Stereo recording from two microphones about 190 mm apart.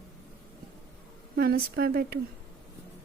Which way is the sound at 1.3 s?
55° right (ahead or behind).